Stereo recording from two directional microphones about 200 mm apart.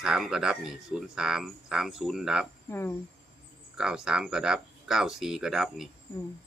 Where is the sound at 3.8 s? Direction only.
5° right (ahead or behind).